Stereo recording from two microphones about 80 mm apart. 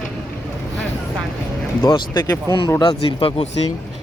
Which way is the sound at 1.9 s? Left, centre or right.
Left.